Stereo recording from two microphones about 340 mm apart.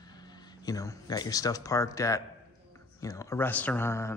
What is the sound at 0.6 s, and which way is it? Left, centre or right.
Speech, centre.